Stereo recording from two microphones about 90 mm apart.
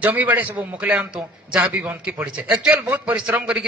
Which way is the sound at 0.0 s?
20° right (ahead or behind).